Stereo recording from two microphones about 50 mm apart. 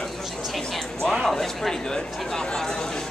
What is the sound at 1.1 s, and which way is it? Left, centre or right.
Speech, centre.